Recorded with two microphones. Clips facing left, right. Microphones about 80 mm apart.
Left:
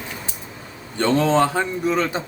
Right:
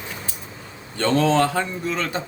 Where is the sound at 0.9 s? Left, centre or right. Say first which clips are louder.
Left 1 dB; centre.